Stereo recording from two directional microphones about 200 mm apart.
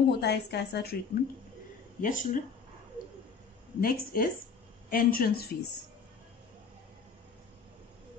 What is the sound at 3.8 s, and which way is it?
A woman's voice, 45° left (ahead or behind).